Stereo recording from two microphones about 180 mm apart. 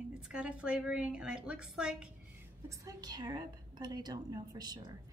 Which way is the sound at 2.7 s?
20° right (ahead or behind).